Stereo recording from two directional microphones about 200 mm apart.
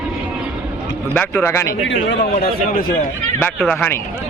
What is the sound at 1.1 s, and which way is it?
Speech, 10° left (ahead or behind).